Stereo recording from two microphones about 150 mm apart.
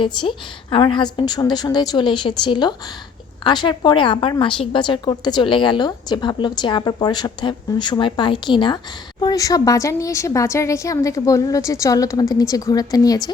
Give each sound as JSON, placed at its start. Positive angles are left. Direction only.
{"t": 0.0, "sound": "a woman's voice", "side_deg": 35}